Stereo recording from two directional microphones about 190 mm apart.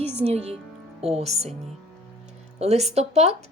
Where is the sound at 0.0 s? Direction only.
35° right (ahead or behind).